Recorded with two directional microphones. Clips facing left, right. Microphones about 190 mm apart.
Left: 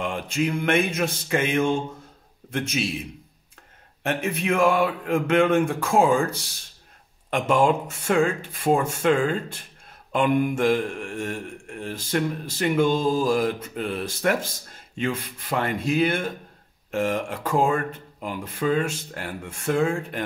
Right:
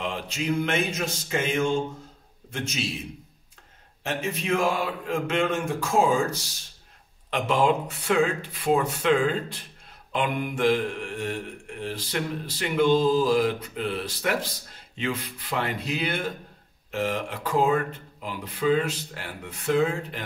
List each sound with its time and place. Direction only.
0.0 s speech: 50° left (ahead or behind)
4.0 s speech: 60° left (ahead or behind)
7.2 s a sound: 50° left (ahead or behind)